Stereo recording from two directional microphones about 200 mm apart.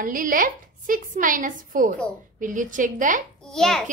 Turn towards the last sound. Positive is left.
turn(degrees=0)  # may be behind; listen again after turning